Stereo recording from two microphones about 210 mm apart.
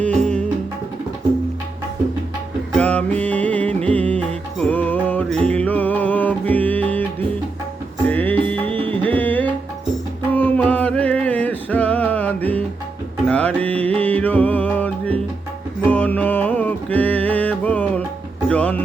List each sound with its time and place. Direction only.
0.2 s music: 5° left (ahead or behind)
2.7 s music: 5° left (ahead or behind)
8.6 s music: 25° right (ahead or behind)
9.0 s music: 10° left (ahead or behind)